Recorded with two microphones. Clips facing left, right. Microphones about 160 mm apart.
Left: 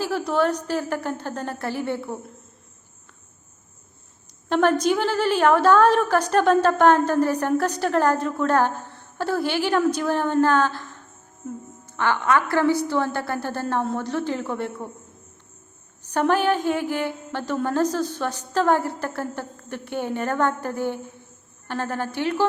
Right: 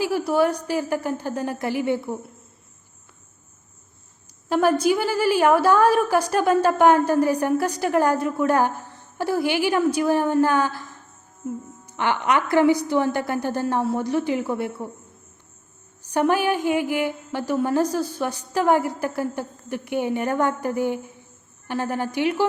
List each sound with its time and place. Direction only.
0.0 s a woman's voice: 10° right (ahead or behind)
4.4 s a woman's voice: 10° right (ahead or behind)
11.9 s a woman's voice: 15° right (ahead or behind)
16.1 s a woman's voice: 10° right (ahead or behind)